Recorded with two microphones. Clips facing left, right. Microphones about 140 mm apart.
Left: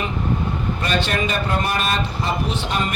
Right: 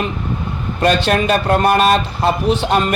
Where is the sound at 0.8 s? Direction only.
65° right (ahead or behind).